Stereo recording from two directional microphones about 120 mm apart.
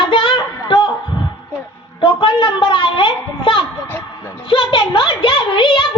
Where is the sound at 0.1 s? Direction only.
40° left (ahead or behind).